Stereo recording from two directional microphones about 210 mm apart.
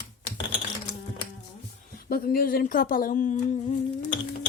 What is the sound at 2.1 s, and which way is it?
Speech, 45° left (ahead or behind).